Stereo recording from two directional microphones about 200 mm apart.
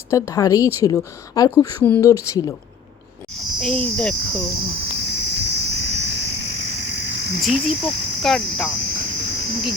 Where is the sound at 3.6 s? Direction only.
5° left (ahead or behind).